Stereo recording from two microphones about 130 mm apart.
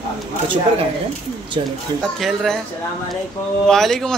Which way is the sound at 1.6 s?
40° right (ahead or behind).